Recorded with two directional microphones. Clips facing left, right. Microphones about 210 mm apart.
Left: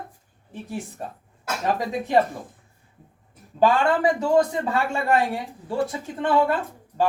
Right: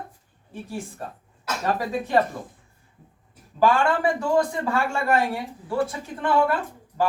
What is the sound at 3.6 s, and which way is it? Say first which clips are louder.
Speech: left 1 dB; 20° left (ahead or behind).